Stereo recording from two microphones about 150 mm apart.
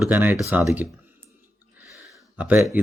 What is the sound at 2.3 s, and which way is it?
Speech, 10° right (ahead or behind).